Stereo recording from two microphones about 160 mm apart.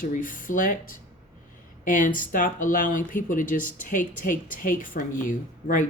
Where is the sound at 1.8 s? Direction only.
55° left (ahead or behind).